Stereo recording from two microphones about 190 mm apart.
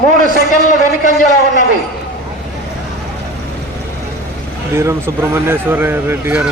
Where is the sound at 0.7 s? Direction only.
45° left (ahead or behind).